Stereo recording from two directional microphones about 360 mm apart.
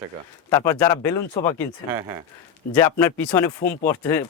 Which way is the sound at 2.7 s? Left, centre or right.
Centre.